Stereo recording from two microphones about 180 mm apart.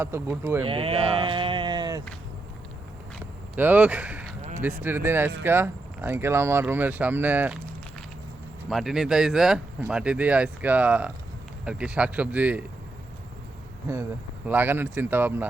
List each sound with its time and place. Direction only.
0.0 s speech: 15° right (ahead or behind)
0.6 s speech: 30° right (ahead or behind)
3.5 s speech: 10° right (ahead or behind)
8.7 s speech: centre (ahead or behind)
14.4 s speech: 10° right (ahead or behind)